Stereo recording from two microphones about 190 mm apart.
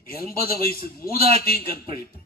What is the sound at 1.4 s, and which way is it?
Speech, 50° left (ahead or behind).